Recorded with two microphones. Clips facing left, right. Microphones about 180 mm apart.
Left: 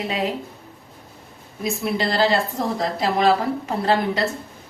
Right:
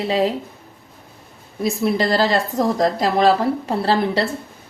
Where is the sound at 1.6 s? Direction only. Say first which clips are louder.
Right 4 dB; 40° right (ahead or behind).